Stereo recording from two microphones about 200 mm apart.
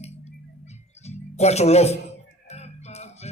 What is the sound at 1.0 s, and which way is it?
Music, 35° left (ahead or behind).